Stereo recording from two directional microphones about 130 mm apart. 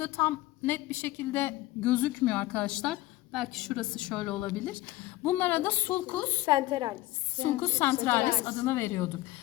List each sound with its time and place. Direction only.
0.0 s a woman's voice: 20° left (ahead or behind)
6.4 s a woman's voice: 35° right (ahead or behind)
7.4 s a woman's voice: 20° left (ahead or behind)